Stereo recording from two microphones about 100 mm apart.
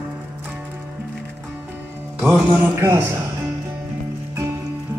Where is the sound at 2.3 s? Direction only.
15° right (ahead or behind).